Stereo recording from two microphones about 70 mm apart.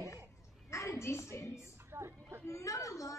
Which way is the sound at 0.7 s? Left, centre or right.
Left.